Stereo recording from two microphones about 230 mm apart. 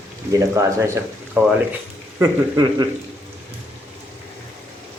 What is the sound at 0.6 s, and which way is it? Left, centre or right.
A man's voice, centre.